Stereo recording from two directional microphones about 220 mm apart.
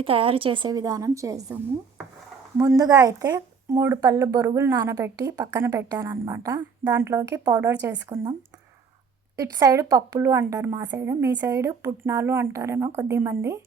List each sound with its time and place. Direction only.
0.0 s a woman's voice: 25° right (ahead or behind)
2.6 s speech: 15° right (ahead or behind)